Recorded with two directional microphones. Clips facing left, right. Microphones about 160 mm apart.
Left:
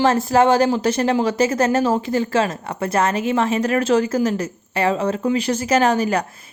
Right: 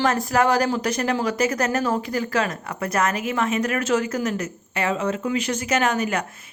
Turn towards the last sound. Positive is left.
turn(degrees=35)  # may be behind; listen again after turning